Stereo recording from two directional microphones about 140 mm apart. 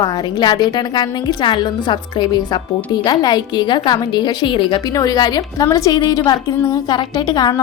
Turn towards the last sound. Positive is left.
turn(degrees=25)  # may be behind; listen again after turning